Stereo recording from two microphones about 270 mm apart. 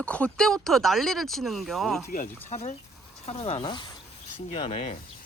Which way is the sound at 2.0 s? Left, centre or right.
Left.